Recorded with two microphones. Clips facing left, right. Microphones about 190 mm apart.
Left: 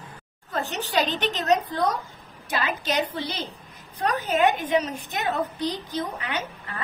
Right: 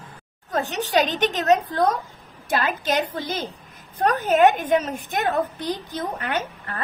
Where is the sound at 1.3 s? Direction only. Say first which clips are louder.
Right 3 dB; 50° right (ahead or behind).